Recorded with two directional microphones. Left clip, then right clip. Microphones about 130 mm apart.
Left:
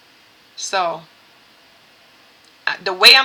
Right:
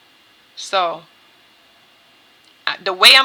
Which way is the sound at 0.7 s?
40° right (ahead or behind).